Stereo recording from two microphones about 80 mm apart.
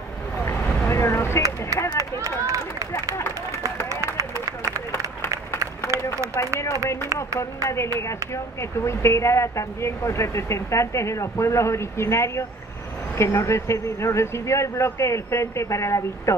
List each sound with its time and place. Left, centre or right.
0.5 s vehicle: left
2.0 s run: right
4.2 s a sound: right
7.2 s speech: left